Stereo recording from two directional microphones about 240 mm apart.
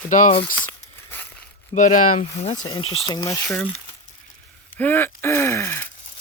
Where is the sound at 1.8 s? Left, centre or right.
Left; by 3.4 s centre.